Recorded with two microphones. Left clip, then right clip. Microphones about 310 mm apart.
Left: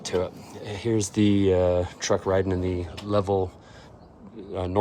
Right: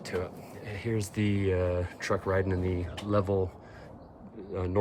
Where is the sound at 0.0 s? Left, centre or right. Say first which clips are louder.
Left 7 dB; centre.